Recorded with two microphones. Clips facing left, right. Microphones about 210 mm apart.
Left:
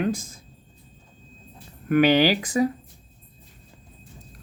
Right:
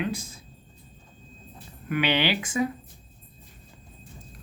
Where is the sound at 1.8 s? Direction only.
45° left (ahead or behind).